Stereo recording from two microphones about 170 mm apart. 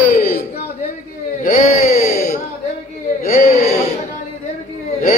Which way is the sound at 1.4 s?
45° left (ahead or behind).